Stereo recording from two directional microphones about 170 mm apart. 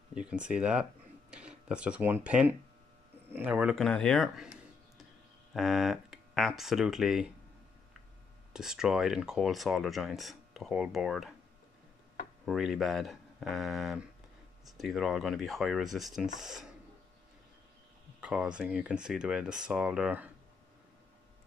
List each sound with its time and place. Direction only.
0.1 s speech: 5° right (ahead or behind)
3.7 s speech: 5° left (ahead or behind)
8.5 s speech: 5° right (ahead or behind)
12.4 s speech: centre (ahead or behind)
18.2 s speech: 5° right (ahead or behind)